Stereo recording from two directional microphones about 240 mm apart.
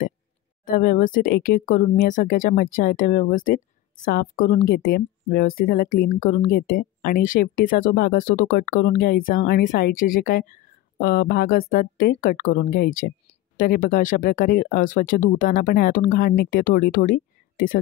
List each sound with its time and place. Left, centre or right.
0.7 s speech: left